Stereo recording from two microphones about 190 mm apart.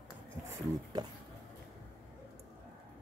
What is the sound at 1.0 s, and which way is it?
Speech, 20° right (ahead or behind).